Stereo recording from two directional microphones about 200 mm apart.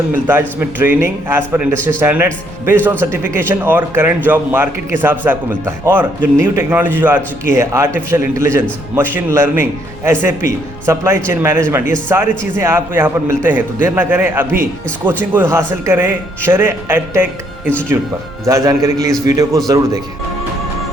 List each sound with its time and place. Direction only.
0.3 s a man's voice: 10° right (ahead or behind)
18.4 s a man's voice: 15° right (ahead or behind)